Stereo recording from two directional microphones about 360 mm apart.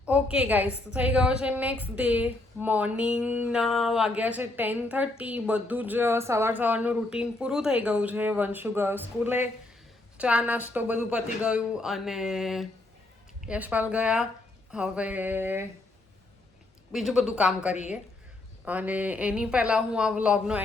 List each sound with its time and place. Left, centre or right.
0.0 s a woman's voice: centre
16.9 s a woman's voice: centre